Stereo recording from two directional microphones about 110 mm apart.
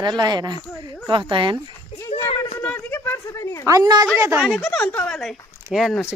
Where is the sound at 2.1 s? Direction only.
75° left (ahead or behind).